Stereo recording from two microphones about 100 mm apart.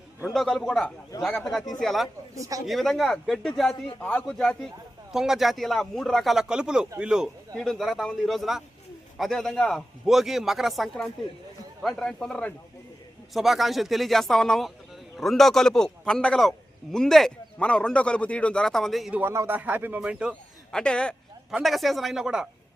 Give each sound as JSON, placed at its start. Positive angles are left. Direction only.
{"t": 0.3, "sound": "a man's voice", "side_deg": 0}
{"t": 2.3, "sound": "speech", "side_deg": -35}
{"t": 2.6, "sound": "a man's voice", "side_deg": 0}
{"t": 5.1, "sound": "a man's voice", "side_deg": -5}
{"t": 7.5, "sound": "a man's voice", "side_deg": 5}
{"t": 13.3, "sound": "a man's voice", "side_deg": 0}
{"t": 19.3, "sound": "speech", "side_deg": -30}
{"t": 19.5, "sound": "speech", "side_deg": -15}
{"t": 20.7, "sound": "a man's voice", "side_deg": 10}